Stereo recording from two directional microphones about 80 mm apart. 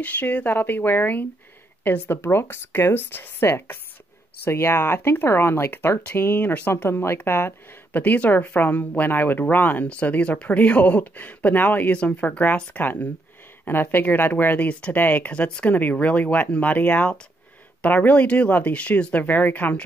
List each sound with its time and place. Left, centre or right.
0.0 s speech: centre